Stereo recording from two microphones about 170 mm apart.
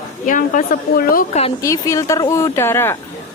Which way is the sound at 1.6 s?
20° left (ahead or behind).